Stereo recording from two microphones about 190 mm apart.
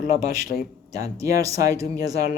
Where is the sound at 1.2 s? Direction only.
15° right (ahead or behind).